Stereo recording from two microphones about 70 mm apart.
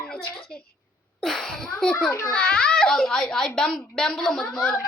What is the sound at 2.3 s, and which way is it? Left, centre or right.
A child's voice, centre.